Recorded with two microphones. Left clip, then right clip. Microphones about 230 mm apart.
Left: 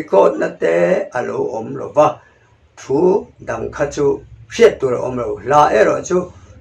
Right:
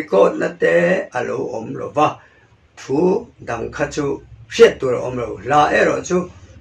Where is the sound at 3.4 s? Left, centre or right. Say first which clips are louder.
Left 2 dB; right.